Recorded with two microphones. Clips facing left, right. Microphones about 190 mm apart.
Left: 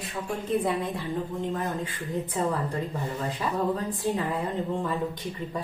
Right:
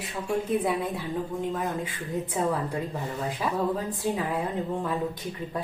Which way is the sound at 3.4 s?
5° right (ahead or behind).